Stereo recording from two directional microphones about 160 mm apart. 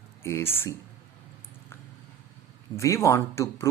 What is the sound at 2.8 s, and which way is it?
Speech, 20° left (ahead or behind).